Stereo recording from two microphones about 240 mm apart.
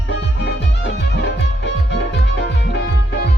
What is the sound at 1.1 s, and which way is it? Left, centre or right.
Music, left.